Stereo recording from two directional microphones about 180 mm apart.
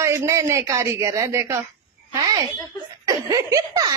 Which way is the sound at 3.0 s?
20° right (ahead or behind).